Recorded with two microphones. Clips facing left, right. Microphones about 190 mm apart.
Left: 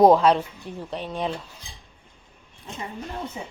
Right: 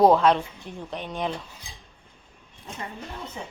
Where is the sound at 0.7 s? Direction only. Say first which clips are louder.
Left 3 dB; 35° left (ahead or behind).